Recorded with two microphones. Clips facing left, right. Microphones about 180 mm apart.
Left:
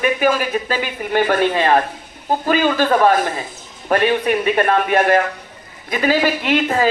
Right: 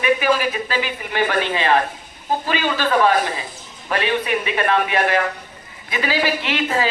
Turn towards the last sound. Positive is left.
turn(degrees=45)  # may be behind; listen again after turning